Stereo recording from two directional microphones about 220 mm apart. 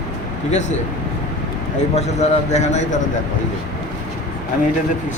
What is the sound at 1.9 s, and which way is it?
A man's voice, 30° left (ahead or behind).